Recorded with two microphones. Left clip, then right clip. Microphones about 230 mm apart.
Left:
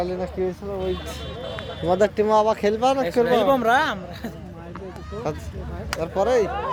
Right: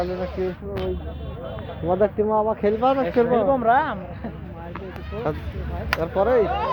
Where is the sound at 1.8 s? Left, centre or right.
Left.